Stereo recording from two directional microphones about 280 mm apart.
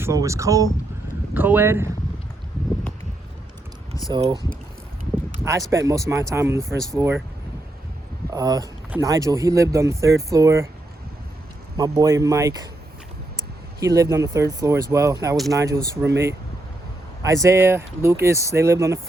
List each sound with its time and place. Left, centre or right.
0.0 s speech: centre
4.1 s speech: centre
5.5 s speech: centre
8.3 s speech: centre
11.8 s speech: centre
13.7 s speech: centre
17.2 s speech: centre